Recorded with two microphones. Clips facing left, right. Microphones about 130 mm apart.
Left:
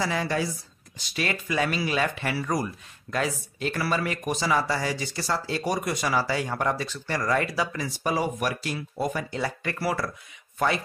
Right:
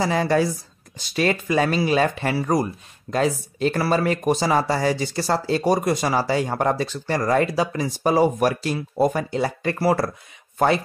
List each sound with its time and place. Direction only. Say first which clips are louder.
0.0 s speech: right 7 dB; 35° right (ahead or behind)
9.3 s speech: right 6 dB; 30° right (ahead or behind)